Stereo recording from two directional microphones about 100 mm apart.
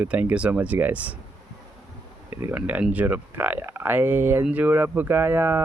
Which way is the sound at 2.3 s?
25° right (ahead or behind).